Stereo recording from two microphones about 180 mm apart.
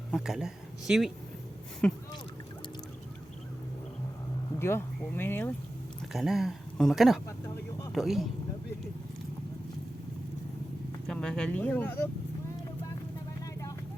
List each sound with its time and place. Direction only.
0.1 s speech: centre (ahead or behind)
4.6 s speech: 15° left (ahead or behind)
6.1 s speech: centre (ahead or behind)
7.3 s speech: 20° left (ahead or behind)
7.9 s speech: centre (ahead or behind)
11.1 s speech: 5° left (ahead or behind)